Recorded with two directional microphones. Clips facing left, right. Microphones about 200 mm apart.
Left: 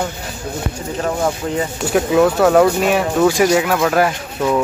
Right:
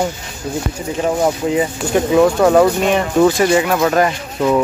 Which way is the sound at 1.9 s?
5° left (ahead or behind).